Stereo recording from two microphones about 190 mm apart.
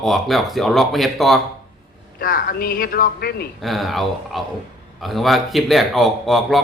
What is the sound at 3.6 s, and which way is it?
A man's voice, centre (ahead or behind).